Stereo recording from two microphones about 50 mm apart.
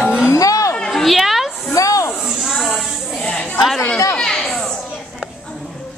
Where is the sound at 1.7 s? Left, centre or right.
Left.